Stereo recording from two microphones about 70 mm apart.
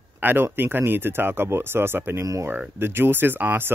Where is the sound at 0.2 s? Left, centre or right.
Right.